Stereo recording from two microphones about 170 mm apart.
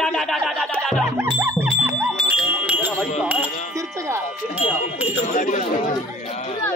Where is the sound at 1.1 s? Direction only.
15° right (ahead or behind).